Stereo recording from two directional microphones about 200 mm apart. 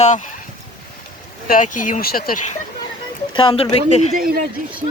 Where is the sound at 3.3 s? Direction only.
25° left (ahead or behind).